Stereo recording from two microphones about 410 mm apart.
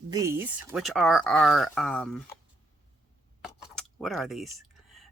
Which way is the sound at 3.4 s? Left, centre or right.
Centre.